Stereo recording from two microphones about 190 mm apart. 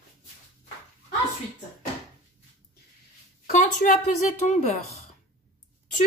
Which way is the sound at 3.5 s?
40° left (ahead or behind).